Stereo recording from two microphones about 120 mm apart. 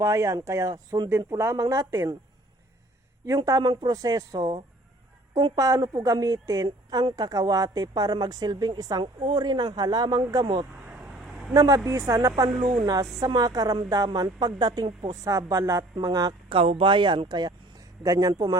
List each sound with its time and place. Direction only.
0.0 s a woman's voice: 25° right (ahead or behind)
3.2 s a woman's voice: 30° right (ahead or behind)
10.9 s vehicle: 5° right (ahead or behind)
11.5 s a woman's voice: 30° right (ahead or behind)
15.2 s a woman's voice: 25° right (ahead or behind)
16.5 s speech: 50° right (ahead or behind); by 18.5 s 30° right (ahead or behind)